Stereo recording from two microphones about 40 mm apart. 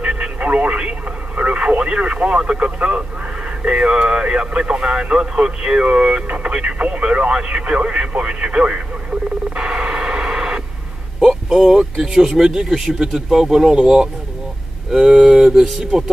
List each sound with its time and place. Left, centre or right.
0.0 s radio: right
3.6 s speech: right
6.2 s radio: right
11.2 s speech: centre